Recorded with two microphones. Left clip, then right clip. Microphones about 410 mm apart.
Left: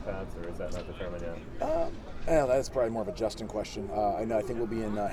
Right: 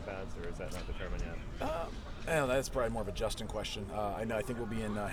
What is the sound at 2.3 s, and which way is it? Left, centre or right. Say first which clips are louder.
A man's voice: left 6 dB; right.